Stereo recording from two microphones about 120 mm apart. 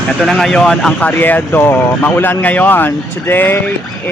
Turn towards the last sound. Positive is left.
turn(degrees=15)  # may be behind; listen again after turning